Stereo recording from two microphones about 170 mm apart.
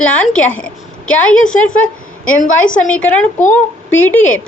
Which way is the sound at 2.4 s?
50° left (ahead or behind).